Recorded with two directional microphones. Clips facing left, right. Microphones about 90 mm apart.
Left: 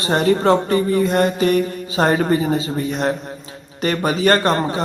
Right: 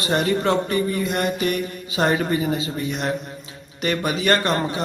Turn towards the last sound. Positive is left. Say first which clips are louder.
# left 4 dB
turn(degrees=35)  # may be behind; listen again after turning